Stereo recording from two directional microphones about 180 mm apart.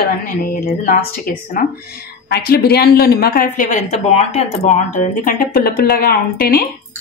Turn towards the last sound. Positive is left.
turn(degrees=55)  # may be behind; listen again after turning